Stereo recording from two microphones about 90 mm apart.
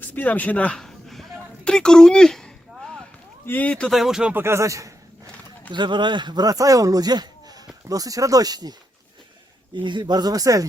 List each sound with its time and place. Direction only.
0.0 s a sound: 20° left (ahead or behind)
3.4 s speech: 20° left (ahead or behind)
3.8 s speech: 5° right (ahead or behind)
4.4 s speech: 30° right (ahead or behind)
5.7 s speech: 60° right (ahead or behind)
9.8 s speech: 60° right (ahead or behind); by 10.7 s 40° right (ahead or behind)